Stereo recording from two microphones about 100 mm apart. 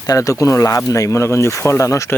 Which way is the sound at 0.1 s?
35° left (ahead or behind).